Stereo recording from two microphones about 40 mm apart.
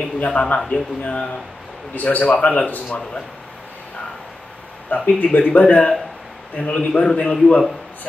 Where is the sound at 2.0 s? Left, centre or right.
Left.